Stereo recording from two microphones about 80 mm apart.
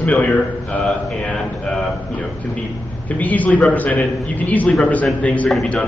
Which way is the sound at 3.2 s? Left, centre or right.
Centre.